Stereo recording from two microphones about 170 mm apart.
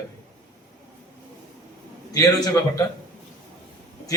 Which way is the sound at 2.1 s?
20° left (ahead or behind).